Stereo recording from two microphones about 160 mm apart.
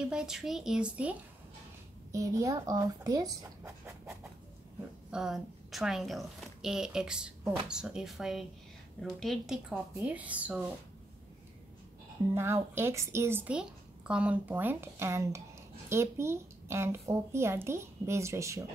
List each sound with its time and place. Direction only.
0.1 s a woman's voice: 5° right (ahead or behind)
2.1 s a woman's voice: 20° right (ahead or behind)
12.4 s a woman's voice: 15° right (ahead or behind)